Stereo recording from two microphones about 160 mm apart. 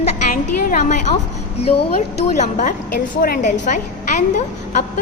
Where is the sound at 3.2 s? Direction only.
65° left (ahead or behind); by 4.2 s 50° left (ahead or behind).